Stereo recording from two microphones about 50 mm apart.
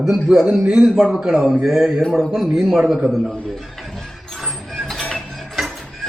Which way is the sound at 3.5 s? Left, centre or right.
Centre.